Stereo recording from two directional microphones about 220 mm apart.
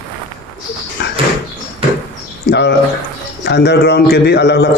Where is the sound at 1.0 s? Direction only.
50° left (ahead or behind).